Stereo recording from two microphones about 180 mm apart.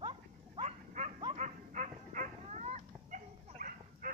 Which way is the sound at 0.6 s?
40° right (ahead or behind).